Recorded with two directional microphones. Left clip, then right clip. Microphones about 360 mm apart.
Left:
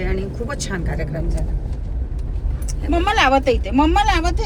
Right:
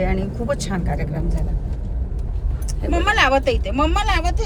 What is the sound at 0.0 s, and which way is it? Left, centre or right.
Speech, centre.